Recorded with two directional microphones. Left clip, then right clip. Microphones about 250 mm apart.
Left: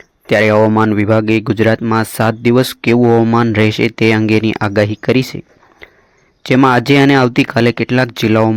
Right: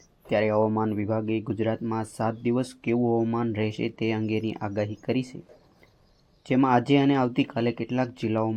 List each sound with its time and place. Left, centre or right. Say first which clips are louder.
0.3 s speech: left 13 dB; left
6.4 s speech: left 12 dB; left